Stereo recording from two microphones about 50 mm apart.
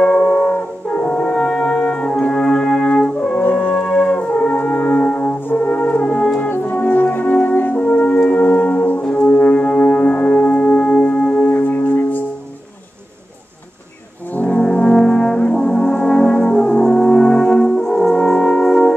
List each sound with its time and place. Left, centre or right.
0.9 s french horn: left
1.3 s brass instrument: centre
3.7 s french horn: centre
4.6 s music: left
5.6 s brass instrument: left
6.5 s french horn: left
8.2 s music: left
8.5 s music: left
11.4 s singing bowl: left
14.5 s brass instrument: centre